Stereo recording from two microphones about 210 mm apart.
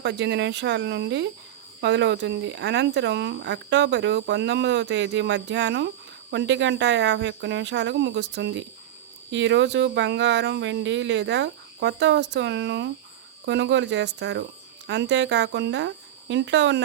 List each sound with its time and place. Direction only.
0.0 s speech: 55° right (ahead or behind)